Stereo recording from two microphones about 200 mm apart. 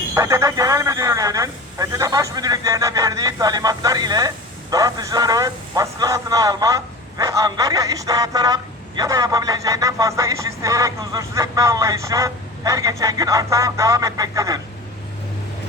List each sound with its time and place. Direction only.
0.1 s speech: 15° right (ahead or behind)